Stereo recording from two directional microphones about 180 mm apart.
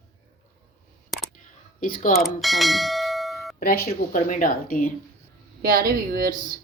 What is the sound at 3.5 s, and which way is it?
A woman's voice, 55° left (ahead or behind).